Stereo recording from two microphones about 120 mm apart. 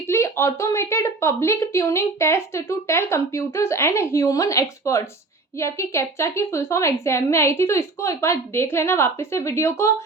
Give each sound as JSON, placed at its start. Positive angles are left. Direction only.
{"t": 0.1, "sound": "a woman's voice", "side_deg": 20}